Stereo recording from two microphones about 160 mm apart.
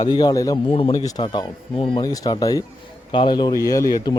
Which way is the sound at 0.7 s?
35° left (ahead or behind).